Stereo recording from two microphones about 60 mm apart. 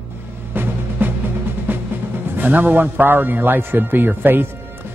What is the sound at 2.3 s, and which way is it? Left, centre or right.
Speech, right.